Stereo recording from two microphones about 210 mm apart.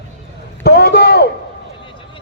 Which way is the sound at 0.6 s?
45° left (ahead or behind).